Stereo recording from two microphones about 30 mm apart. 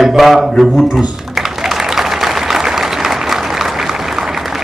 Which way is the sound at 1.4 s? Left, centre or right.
Centre.